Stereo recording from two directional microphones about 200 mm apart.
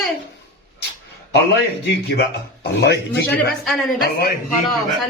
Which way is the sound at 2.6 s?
55° left (ahead or behind).